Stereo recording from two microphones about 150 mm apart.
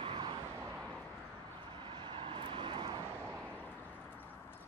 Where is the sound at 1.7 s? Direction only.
30° right (ahead or behind).